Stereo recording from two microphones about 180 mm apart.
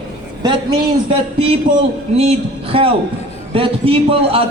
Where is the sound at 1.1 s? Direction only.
30° right (ahead or behind).